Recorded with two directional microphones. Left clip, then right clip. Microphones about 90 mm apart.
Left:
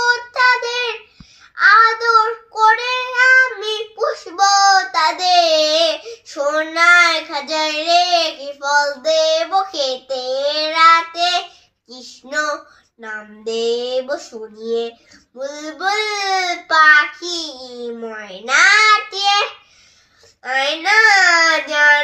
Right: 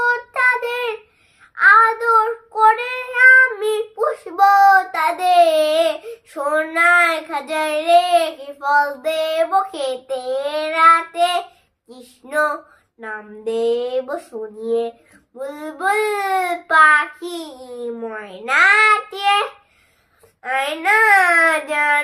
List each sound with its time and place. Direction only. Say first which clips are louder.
0.1 s child singing: left 3 dB; 30° right (ahead or behind)
11.9 s a sound: left 1 dB; 40° right (ahead or behind)
14.6 s speech: even; 30° right (ahead or behind)
15.4 s child singing: left 1 dB; 40° right (ahead or behind)